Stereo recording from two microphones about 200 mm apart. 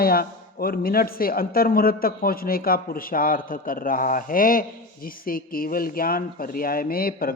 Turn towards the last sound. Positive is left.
turn(degrees=50)  # may be behind; listen again after turning